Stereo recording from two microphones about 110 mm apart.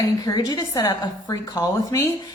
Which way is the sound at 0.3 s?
35° left (ahead or behind).